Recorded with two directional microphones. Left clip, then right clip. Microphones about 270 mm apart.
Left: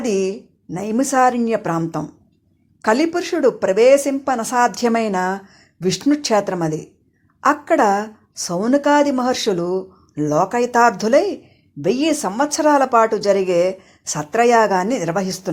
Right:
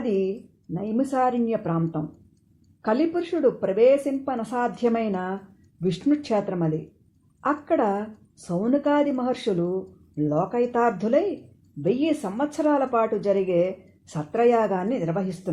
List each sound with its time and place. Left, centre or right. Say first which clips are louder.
0.0 s speech: left 5 dB; left